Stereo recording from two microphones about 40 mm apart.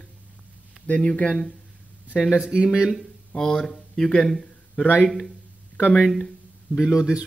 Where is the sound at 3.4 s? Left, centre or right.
Centre.